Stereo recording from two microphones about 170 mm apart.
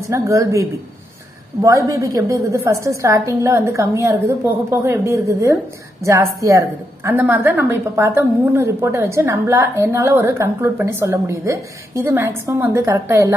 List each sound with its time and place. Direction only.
0.0 s a woman's voice: 15° right (ahead or behind)